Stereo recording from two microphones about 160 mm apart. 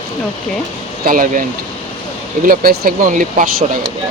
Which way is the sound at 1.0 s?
60° right (ahead or behind).